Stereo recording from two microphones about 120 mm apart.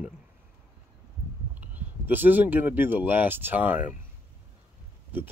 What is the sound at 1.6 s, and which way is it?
Speech, 15° right (ahead or behind).